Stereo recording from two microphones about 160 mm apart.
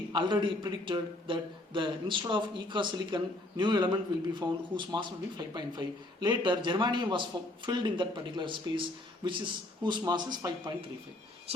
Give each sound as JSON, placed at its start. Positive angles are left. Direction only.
{"t": 0.1, "sound": "speech", "side_deg": -30}
{"t": 9.8, "sound": "speech", "side_deg": -25}